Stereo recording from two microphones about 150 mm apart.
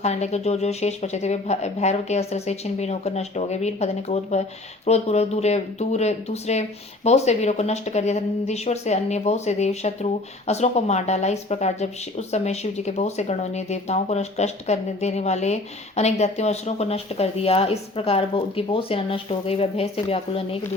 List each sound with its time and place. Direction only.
0.0 s speech: 50° left (ahead or behind)